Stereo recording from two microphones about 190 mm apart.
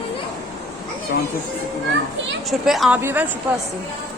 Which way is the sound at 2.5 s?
Centre (ahead or behind).